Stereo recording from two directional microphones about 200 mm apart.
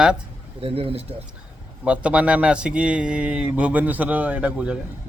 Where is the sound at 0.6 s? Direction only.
30° right (ahead or behind).